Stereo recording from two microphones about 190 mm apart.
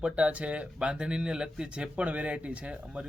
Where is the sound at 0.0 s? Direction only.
5° right (ahead or behind).